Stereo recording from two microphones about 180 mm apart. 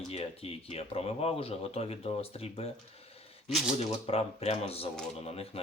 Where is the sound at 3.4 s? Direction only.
Centre (ahead or behind).